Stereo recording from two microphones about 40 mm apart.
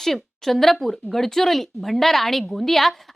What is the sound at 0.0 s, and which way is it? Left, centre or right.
Speech, centre.